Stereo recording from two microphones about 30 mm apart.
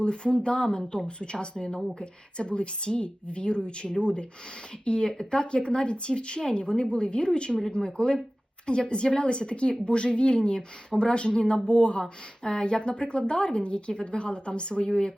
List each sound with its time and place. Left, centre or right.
0.0 s speech: left